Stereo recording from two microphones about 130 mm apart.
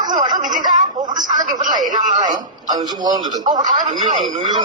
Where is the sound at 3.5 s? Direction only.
80° right.